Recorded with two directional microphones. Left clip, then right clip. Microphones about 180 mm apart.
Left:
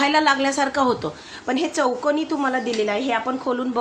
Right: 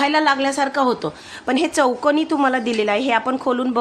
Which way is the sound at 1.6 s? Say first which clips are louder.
Right 4 dB; 35° right (ahead or behind).